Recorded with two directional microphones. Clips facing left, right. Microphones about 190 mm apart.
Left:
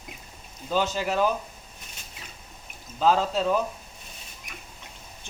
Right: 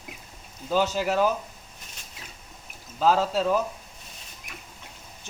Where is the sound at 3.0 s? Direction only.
5° right (ahead or behind).